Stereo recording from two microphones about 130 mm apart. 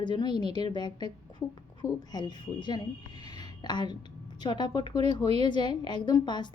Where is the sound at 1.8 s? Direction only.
35° left (ahead or behind).